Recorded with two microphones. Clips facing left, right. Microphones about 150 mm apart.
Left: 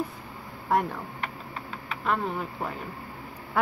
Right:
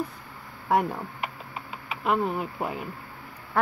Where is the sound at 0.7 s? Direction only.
10° right (ahead or behind).